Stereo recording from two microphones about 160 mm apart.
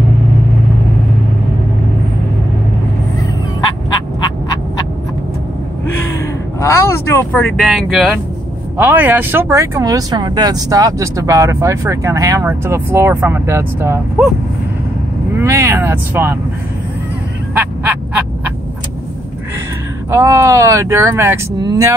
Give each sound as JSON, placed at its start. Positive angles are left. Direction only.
{"t": 6.6, "sound": "speech", "side_deg": 15}
{"t": 7.5, "sound": "speech", "side_deg": 0}
{"t": 15.3, "sound": "speech", "side_deg": -20}
{"t": 17.6, "sound": "fowl", "side_deg": -10}
{"t": 20.1, "sound": "speech", "side_deg": -15}